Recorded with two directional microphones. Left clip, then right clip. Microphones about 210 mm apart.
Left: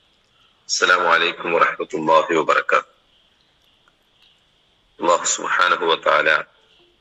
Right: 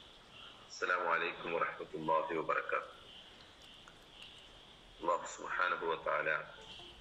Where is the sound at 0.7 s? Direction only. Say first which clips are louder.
Left 19 dB; 50° left (ahead or behind).